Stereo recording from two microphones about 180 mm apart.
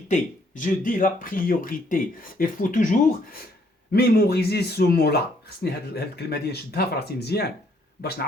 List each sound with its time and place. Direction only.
0.1 s speech: 45° left (ahead or behind)
3.9 s speech: 60° left (ahead or behind)